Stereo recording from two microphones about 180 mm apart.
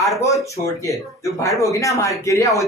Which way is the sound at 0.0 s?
15° left (ahead or behind).